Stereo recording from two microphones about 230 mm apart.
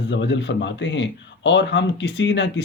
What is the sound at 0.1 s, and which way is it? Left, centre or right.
Speech, left.